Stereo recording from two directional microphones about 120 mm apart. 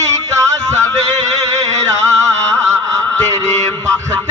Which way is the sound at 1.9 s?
25° right (ahead or behind).